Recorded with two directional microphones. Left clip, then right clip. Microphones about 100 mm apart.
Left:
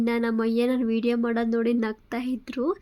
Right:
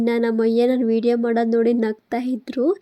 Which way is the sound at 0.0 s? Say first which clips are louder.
Right 6 dB; 30° right (ahead or behind).